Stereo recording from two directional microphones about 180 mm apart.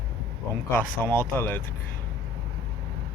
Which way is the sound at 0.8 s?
10° left (ahead or behind).